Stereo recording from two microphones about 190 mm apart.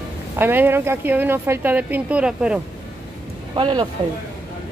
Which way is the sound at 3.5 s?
25° right (ahead or behind).